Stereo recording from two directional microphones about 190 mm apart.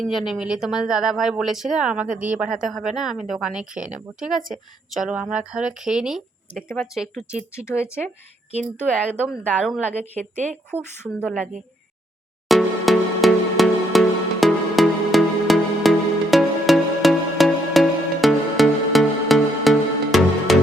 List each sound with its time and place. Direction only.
0.0 s speech: centre (ahead or behind)
9.5 s speech: 5° left (ahead or behind)
10.0 s a woman's voice: 35° right (ahead or behind)
10.7 s speech: 10° right (ahead or behind)
12.5 s music: centre (ahead or behind)